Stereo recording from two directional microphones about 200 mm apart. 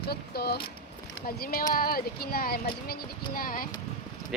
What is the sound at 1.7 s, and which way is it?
Speech, 45° left (ahead or behind).